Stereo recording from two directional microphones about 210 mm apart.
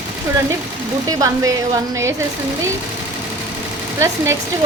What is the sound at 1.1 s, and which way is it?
Speech, 15° right (ahead or behind).